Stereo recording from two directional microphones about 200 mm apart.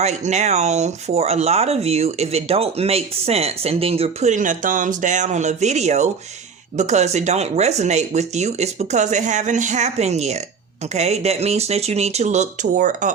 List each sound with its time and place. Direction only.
0.0 s speech: 35° right (ahead or behind)